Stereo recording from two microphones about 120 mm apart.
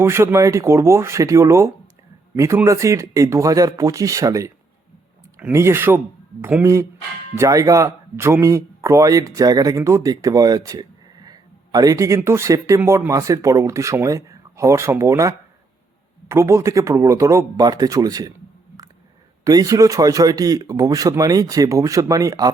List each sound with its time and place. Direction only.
0.0 s a man's voice: 20° right (ahead or behind)
19.5 s a man's voice: 30° right (ahead or behind)